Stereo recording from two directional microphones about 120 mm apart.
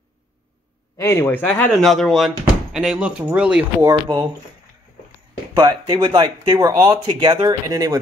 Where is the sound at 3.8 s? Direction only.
30° right (ahead or behind).